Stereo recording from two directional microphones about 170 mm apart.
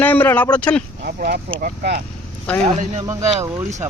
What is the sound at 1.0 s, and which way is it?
Speech, 60° right (ahead or behind).